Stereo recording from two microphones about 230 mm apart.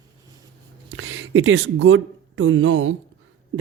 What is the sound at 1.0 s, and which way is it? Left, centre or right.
Speech, right.